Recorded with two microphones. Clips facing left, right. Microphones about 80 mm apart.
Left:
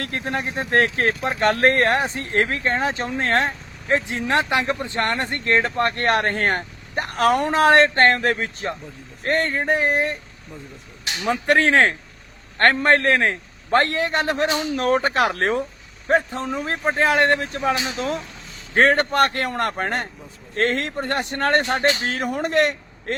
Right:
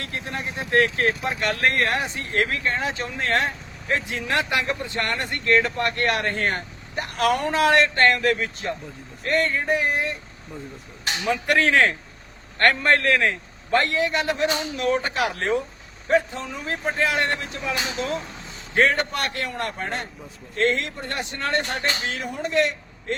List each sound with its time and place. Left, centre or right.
0.0 s speech: left
11.2 s a man's voice: left